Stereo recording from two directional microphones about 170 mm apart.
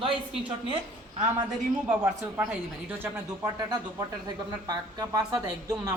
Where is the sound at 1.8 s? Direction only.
5° right (ahead or behind).